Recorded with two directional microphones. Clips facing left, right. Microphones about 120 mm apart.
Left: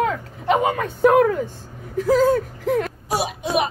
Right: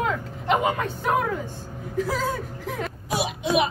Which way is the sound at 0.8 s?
55° left (ahead or behind).